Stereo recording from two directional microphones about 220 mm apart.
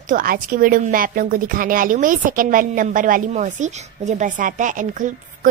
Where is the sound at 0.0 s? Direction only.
40° right (ahead or behind).